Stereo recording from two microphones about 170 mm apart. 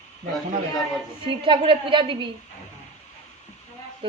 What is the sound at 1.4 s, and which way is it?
Speech, 30° right (ahead or behind).